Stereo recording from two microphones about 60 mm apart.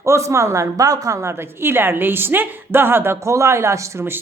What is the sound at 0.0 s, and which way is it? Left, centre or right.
A woman's voice, right.